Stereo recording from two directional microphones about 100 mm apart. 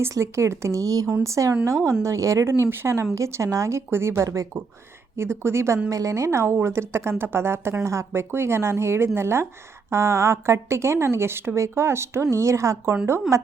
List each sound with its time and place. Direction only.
0.0 s speech: 30° right (ahead or behind)